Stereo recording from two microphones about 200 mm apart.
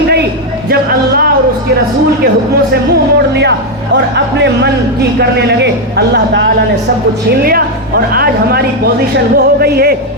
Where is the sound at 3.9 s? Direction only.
60° right (ahead or behind).